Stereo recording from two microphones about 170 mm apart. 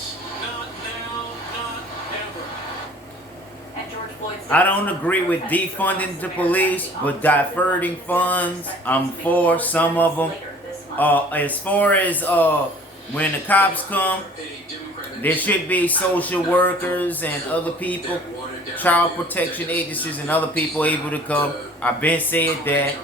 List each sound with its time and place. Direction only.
4.4 s a man's voice: 10° left (ahead or behind)
15.2 s a man's voice: 10° left (ahead or behind)